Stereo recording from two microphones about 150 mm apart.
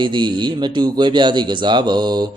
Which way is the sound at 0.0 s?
30° right (ahead or behind).